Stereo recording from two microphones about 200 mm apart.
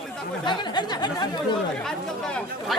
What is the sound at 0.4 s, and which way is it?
Speech, 20° left (ahead or behind).